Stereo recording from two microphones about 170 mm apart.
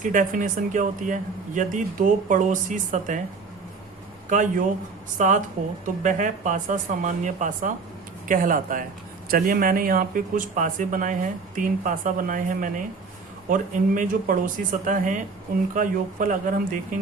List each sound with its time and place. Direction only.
0.0 s speech: 50° right (ahead or behind)
4.3 s speech: 50° right (ahead or behind)